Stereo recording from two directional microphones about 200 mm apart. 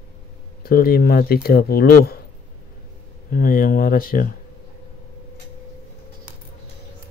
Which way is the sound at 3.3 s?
45° left (ahead or behind).